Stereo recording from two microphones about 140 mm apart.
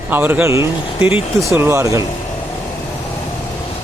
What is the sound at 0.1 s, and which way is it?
Speech, 15° right (ahead or behind).